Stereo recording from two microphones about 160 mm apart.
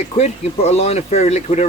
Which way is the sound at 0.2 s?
40° left (ahead or behind).